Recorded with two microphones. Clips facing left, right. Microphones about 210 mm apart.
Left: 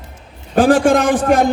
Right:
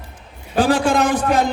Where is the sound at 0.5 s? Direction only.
50° left (ahead or behind).